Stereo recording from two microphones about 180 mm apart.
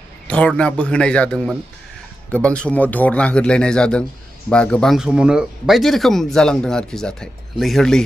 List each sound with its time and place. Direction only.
0.3 s a man's voice: 5° left (ahead or behind)